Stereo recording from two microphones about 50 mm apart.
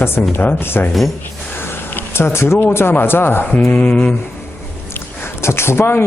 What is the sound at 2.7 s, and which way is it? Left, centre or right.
Speech, left.